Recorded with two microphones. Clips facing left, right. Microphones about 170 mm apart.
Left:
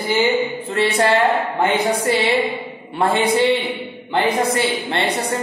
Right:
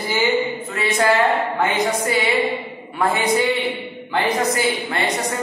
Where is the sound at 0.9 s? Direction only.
30° left (ahead or behind).